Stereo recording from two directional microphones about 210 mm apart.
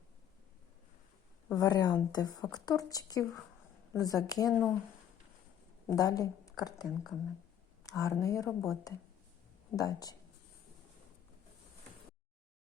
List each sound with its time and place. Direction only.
1.5 s a woman's voice: 15° left (ahead or behind)
5.9 s speech: 15° left (ahead or behind)
7.9 s a woman's voice: 15° left (ahead or behind)